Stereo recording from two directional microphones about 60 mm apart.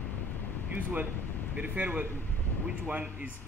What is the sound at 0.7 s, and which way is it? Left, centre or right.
A man's voice, right.